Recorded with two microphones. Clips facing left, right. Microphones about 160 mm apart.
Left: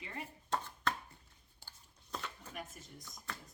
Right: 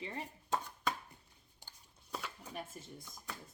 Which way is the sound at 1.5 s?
10° right (ahead or behind).